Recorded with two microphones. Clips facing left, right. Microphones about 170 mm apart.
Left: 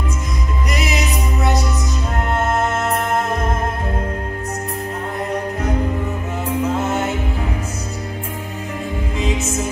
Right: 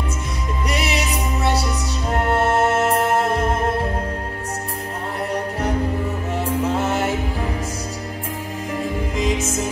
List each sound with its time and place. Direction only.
0.7 s music: 30° right (ahead or behind)